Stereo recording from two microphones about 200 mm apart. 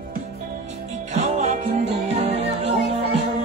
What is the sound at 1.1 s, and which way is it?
Music, 35° right (ahead or behind).